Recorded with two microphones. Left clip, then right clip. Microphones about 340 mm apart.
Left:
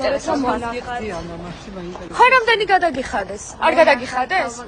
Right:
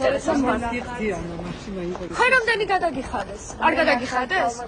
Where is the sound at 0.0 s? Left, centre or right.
Centre.